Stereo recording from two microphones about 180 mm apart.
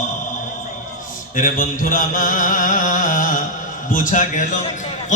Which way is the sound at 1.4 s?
50° left (ahead or behind).